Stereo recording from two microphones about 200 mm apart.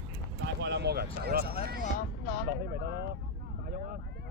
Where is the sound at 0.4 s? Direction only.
60° right (ahead or behind).